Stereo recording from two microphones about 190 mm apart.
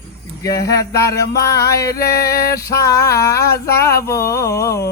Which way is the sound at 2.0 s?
55° left (ahead or behind).